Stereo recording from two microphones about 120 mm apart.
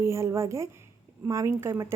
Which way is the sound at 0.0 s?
25° right (ahead or behind).